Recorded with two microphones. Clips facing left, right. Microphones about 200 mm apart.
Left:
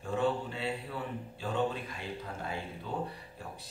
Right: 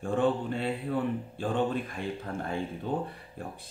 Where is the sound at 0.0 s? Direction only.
50° right (ahead or behind).